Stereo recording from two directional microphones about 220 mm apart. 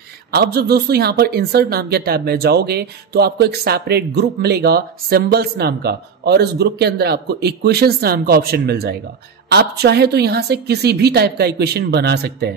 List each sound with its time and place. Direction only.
0.3 s speech: 45° right (ahead or behind)